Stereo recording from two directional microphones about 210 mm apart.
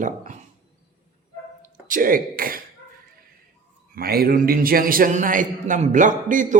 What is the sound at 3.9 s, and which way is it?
Speech, 45° right (ahead or behind).